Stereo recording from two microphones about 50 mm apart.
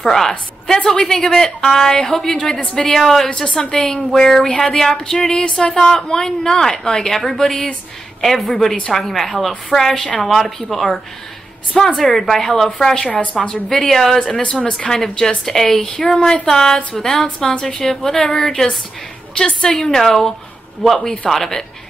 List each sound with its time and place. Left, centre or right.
0.0 s a woman's voice: centre
3.4 s a woman's voice: left
3.7 s a woman's voice: centre
13.0 s a woman's voice: left
13.7 s a woman's voice: centre
19.3 s a woman's voice: centre